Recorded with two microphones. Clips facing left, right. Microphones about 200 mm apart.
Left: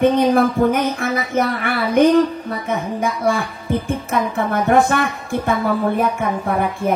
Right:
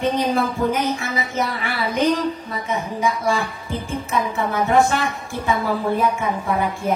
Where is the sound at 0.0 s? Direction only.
55° left (ahead or behind).